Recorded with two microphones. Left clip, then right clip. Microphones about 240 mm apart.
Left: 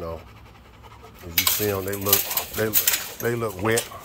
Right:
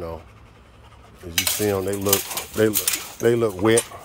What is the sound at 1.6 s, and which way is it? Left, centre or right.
Speech, right.